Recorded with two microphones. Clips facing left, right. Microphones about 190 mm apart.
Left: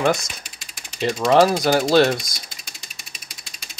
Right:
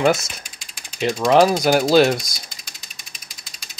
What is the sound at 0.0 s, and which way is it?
Speech, centre (ahead or behind).